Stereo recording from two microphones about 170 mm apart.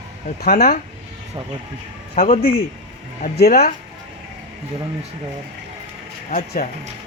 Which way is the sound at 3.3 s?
65° left (ahead or behind).